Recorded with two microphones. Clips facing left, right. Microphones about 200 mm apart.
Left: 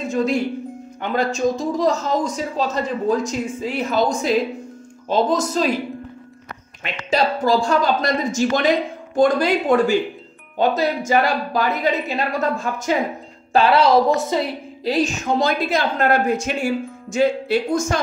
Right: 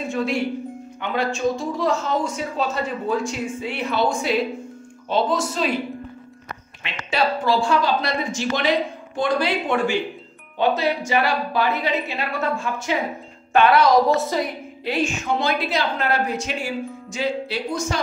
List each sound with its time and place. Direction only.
0.1 s speech: 40° left (ahead or behind)
6.8 s speech: 40° left (ahead or behind)